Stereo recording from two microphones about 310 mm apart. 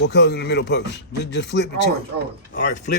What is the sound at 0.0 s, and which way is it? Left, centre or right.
Speech, left.